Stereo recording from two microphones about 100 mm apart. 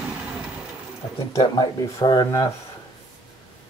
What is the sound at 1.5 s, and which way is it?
Speech, 45° left (ahead or behind).